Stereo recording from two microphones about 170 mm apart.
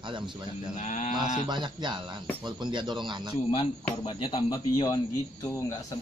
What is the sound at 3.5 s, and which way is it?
A man's voice, 30° left (ahead or behind).